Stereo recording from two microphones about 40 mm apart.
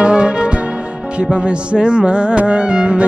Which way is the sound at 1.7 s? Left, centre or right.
Right.